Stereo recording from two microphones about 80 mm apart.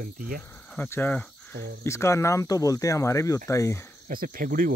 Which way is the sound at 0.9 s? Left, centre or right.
Left.